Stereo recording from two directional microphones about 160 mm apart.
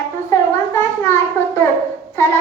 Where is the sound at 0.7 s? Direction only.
15° left (ahead or behind).